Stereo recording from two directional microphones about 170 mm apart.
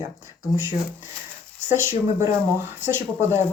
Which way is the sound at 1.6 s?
15° right (ahead or behind).